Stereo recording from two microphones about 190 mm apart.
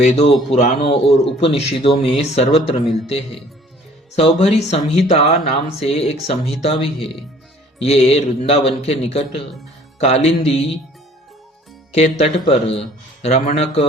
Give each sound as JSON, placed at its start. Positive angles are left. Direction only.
{"t": 0.5, "sound": "speech", "side_deg": 30}
{"t": 11.9, "sound": "speech", "side_deg": 35}